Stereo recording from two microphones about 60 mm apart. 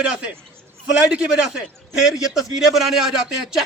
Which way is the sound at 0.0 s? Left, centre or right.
Centre.